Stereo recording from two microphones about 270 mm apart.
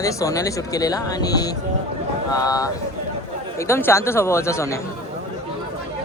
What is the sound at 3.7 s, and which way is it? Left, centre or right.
Speech, centre.